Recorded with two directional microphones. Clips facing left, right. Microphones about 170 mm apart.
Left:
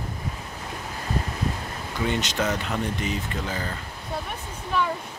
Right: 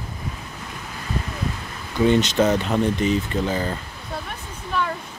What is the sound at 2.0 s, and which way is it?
Speech, 25° right (ahead or behind).